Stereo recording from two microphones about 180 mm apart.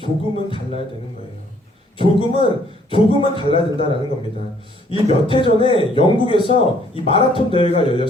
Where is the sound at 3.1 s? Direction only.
30° left (ahead or behind).